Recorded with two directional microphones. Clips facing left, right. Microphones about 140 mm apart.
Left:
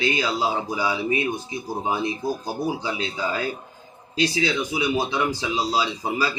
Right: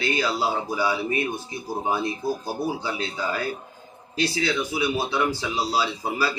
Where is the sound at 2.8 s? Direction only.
20° left (ahead or behind).